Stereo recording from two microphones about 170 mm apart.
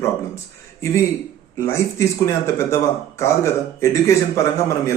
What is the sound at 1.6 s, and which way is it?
A man's voice, 15° left (ahead or behind).